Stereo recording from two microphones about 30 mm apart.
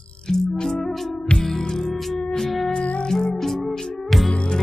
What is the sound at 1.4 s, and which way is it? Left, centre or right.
Music, centre.